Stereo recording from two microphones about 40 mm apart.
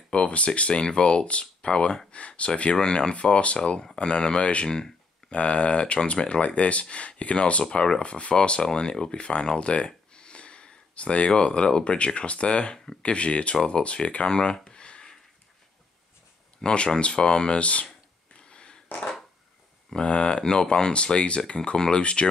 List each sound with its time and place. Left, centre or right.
0.1 s speech: left
4.6 s speech: centre
5.3 s speech: left
16.6 s speech: left
18.5 s a sound: left
20.0 s speech: left
20.4 s speech: centre